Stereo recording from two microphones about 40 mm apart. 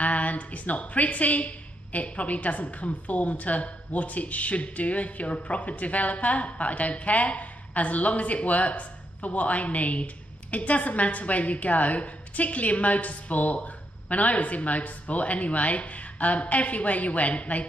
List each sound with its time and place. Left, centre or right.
0.0 s a woman's voice: left